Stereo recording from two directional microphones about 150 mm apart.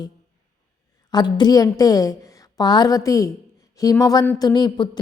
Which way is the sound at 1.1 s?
30° left (ahead or behind).